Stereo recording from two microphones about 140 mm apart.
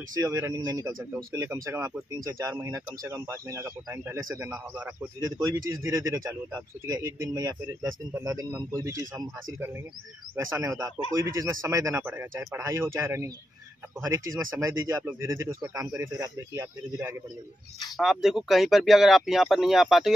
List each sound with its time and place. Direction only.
0.2 s speech: 20° right (ahead or behind)
17.9 s speech: centre (ahead or behind)